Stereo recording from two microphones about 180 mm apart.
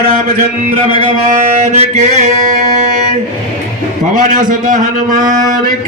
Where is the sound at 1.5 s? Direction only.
40° right (ahead or behind).